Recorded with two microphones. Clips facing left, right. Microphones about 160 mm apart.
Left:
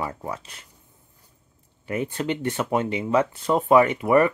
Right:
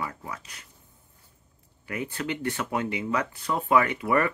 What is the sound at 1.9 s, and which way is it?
Speech, 25° left (ahead or behind).